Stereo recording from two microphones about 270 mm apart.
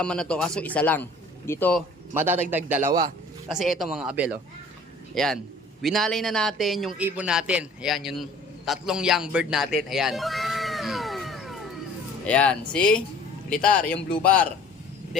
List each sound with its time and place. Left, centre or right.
0.0 s a man's voice: centre
2.1 s a man's voice: centre
3.5 s a man's voice: centre